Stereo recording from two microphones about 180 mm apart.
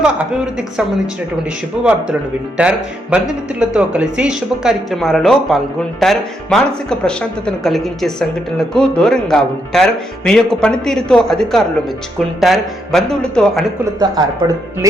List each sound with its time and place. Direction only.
0.0 s speech: 5° right (ahead or behind)
2.6 s speech: 5° right (ahead or behind)
14.0 s speech: 20° right (ahead or behind)